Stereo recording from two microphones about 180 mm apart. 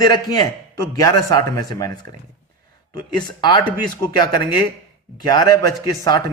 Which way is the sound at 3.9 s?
25° left (ahead or behind).